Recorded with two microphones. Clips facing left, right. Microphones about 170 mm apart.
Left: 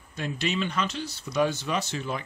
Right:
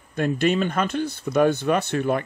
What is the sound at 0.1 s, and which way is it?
Speech, 50° right (ahead or behind).